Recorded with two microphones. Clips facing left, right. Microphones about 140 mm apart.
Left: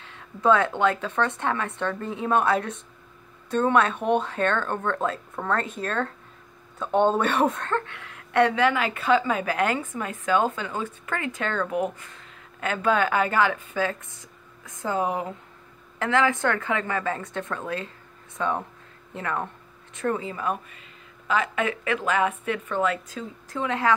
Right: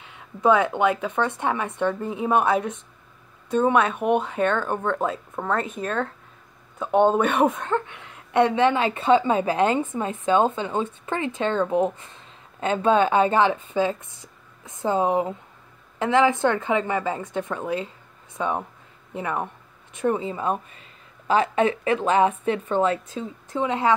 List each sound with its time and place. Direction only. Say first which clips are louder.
0.0 s speech: right 2 dB; 15° right (ahead or behind)
7.6 s a woman's voice: right 2 dB; 15° right (ahead or behind)